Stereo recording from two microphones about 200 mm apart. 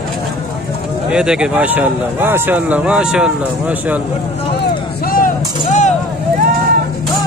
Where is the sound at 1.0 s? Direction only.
5° right (ahead or behind).